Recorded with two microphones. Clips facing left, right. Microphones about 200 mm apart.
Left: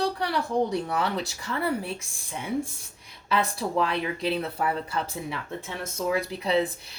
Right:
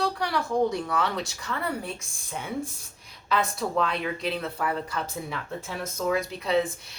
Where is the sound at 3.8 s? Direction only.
30° left (ahead or behind).